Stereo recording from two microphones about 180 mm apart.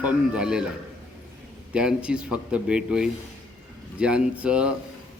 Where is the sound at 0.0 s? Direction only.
5° right (ahead or behind).